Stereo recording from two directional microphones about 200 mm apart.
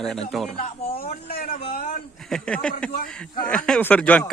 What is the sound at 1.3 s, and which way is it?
Speech, 45° left (ahead or behind).